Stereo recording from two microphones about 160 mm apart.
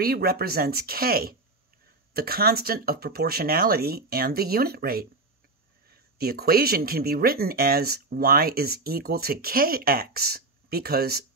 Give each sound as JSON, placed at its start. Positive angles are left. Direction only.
{"t": 0.0, "sound": "speech", "side_deg": -70}
{"t": 6.1, "sound": "speech", "side_deg": -75}